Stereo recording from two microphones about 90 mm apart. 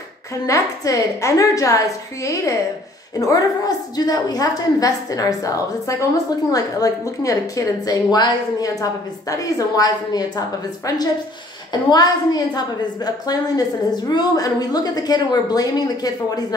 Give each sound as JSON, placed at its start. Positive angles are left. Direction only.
{"t": 0.5, "sound": "a woman's voice", "side_deg": 35}
{"t": 11.7, "sound": "a woman's voice", "side_deg": 45}